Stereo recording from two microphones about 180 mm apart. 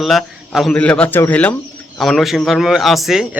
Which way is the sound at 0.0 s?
Centre (ahead or behind).